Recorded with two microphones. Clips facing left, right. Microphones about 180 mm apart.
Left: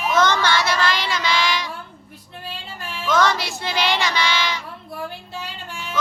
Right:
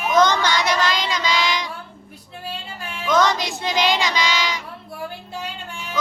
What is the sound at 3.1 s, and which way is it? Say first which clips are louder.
Child singing: right 1 dB; 20° right (ahead or behind).